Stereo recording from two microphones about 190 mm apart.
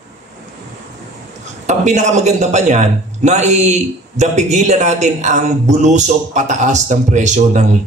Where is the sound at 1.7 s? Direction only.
40° right (ahead or behind).